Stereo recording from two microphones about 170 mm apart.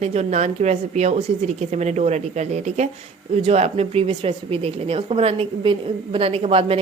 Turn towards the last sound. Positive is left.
turn(degrees=-35)  # may be behind; listen again after turning